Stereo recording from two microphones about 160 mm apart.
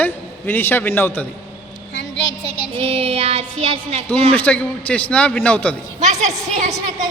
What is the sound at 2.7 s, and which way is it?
Child singing, 35° right (ahead or behind).